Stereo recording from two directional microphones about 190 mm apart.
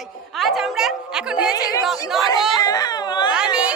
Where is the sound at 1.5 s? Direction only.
20° left (ahead or behind).